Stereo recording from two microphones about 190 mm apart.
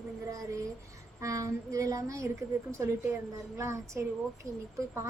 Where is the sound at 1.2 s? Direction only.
15° right (ahead or behind).